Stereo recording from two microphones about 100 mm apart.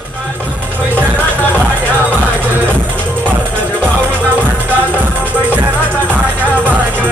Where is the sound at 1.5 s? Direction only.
15° right (ahead or behind).